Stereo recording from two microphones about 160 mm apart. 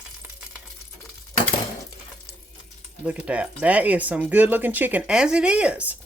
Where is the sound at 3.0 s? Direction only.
10° right (ahead or behind).